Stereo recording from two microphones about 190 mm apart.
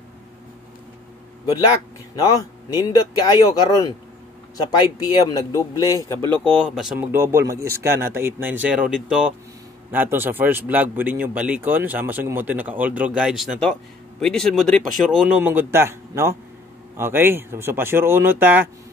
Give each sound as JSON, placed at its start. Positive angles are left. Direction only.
{"t": 2.1, "sound": "a man's voice", "side_deg": 20}